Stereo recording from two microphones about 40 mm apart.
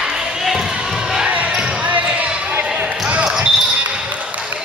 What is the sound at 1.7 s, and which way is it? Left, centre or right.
Basketball bounce, right.